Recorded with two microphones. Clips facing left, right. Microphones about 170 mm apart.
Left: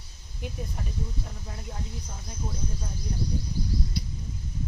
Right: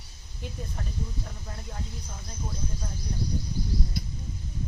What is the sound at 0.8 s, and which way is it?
Speech, 10° left (ahead or behind).